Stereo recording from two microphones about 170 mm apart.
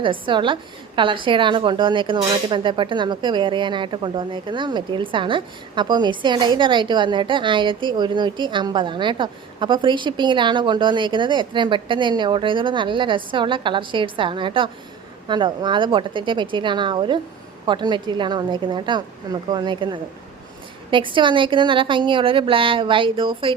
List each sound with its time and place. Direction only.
0.0 s a woman's voice: 30° right (ahead or behind)